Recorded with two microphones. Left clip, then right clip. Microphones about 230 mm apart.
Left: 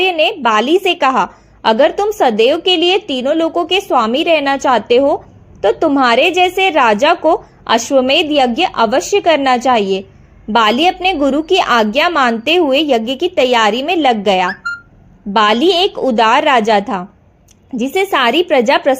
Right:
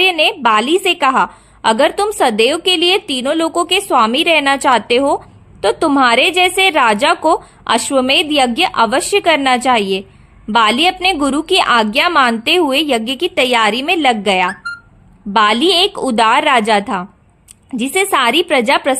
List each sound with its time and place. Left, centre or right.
0.0 s a woman's voice: right